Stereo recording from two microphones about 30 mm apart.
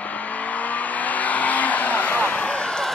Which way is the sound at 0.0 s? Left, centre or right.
Left.